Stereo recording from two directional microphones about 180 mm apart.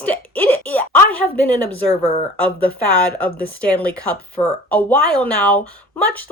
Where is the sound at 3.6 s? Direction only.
10° left (ahead or behind).